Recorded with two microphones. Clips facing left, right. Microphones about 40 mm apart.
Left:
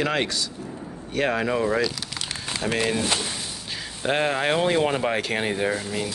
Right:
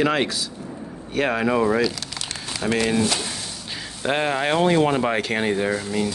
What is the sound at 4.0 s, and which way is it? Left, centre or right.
Speech, centre.